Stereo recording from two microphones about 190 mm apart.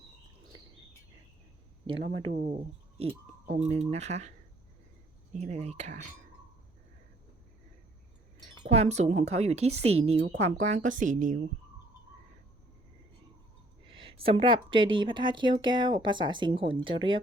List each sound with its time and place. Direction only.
2.0 s speech: 30° right (ahead or behind)
2.3 s speech: 45° right (ahead or behind)
8.6 s speech: 35° right (ahead or behind)
13.8 s a sound: 30° right (ahead or behind)
14.9 s speech: 25° right (ahead or behind)